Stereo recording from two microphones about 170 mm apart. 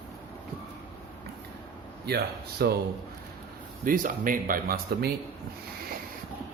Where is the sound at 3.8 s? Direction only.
50° right (ahead or behind).